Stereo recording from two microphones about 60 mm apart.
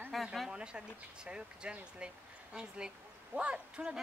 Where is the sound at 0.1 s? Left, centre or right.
Centre.